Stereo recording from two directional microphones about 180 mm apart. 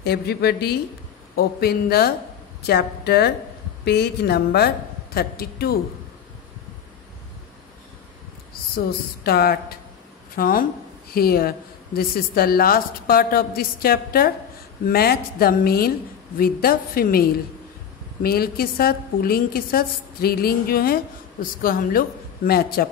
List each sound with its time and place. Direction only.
0.0 s a woman's voice: 65° left (ahead or behind)
8.7 s a woman's voice: 60° left (ahead or behind)